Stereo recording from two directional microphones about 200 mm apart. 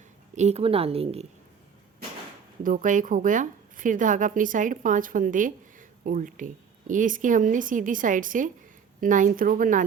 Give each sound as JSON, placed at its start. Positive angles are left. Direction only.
{"t": 0.3, "sound": "a woman's voice", "side_deg": -30}
{"t": 2.6, "sound": "a woman's voice", "side_deg": -40}